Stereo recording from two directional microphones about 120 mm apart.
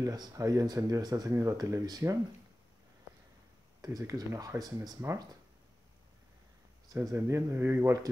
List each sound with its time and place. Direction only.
0.0 s speech: 35° right (ahead or behind)
3.8 s speech: 30° right (ahead or behind)
6.9 s speech: 25° right (ahead or behind)